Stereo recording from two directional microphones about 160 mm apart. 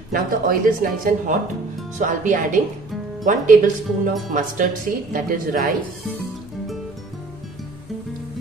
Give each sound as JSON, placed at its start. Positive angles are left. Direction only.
{"t": 0.1, "sound": "speech", "side_deg": -65}